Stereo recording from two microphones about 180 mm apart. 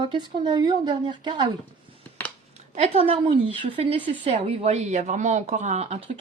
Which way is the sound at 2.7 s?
35° right (ahead or behind).